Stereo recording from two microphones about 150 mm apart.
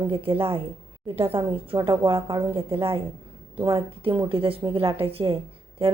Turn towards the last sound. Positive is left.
turn(degrees=-40)  # may be behind; listen again after turning